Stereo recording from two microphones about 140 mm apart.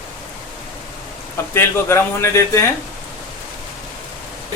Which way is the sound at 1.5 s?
20° left (ahead or behind).